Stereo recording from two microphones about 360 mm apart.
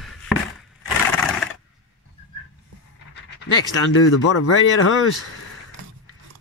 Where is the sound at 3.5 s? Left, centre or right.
Left.